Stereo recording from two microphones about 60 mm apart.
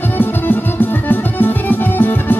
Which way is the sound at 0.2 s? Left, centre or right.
Left.